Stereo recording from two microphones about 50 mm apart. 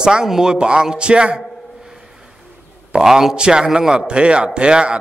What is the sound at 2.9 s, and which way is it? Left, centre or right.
A man's voice, centre.